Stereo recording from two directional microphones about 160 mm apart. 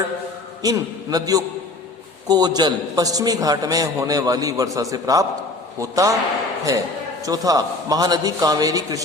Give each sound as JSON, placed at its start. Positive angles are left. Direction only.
{"t": 0.6, "sound": "a man's voice", "side_deg": -25}
{"t": 7.3, "sound": "a man's voice", "side_deg": -25}